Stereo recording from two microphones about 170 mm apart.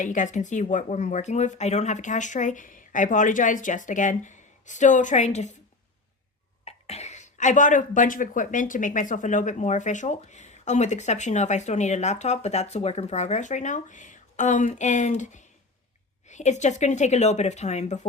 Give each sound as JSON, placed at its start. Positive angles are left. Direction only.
{"t": 0.0, "sound": "speech", "side_deg": 45}
{"t": 6.7, "sound": "speech", "side_deg": 40}